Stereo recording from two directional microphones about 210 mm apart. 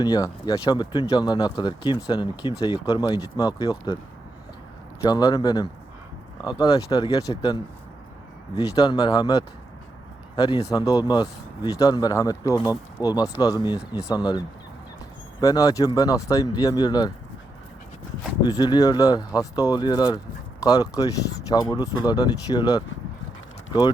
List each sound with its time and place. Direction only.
0.0 s speech: 20° left (ahead or behind)
5.0 s speech: 20° left (ahead or behind)
18.4 s speech: 20° left (ahead or behind)